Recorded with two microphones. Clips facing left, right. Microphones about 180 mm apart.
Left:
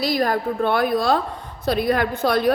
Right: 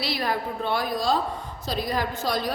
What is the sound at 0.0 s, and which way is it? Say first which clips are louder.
A woman's voice: left 7 dB; 45° left (ahead or behind).